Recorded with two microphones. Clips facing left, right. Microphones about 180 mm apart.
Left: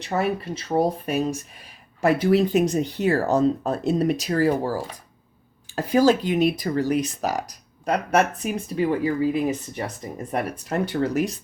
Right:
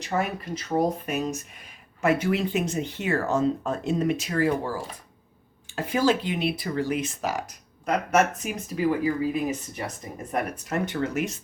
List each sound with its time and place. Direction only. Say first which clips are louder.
0.0 s speech: left 4 dB; 30° left (ahead or behind)